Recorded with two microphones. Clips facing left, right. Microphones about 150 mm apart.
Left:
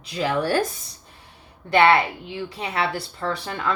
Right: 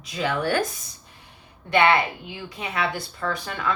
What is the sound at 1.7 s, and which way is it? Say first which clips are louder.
A woman's voice: left 2 dB; 30° left (ahead or behind).